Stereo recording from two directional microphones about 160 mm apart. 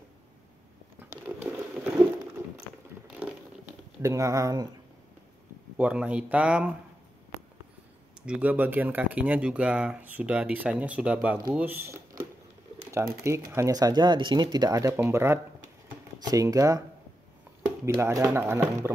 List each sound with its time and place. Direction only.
1.5 s a sound: 15° right (ahead or behind)
4.0 s speech: 20° right (ahead or behind)
5.8 s speech: 10° right (ahead or behind)
8.3 s speech: 10° right (ahead or behind)
17.9 s speech: 15° right (ahead or behind)